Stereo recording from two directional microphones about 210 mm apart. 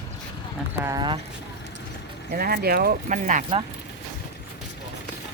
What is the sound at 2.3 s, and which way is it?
Speech, 45° right (ahead or behind).